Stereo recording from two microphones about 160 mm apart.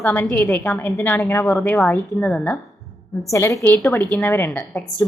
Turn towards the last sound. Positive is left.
turn(degrees=10)  # may be behind; listen again after turning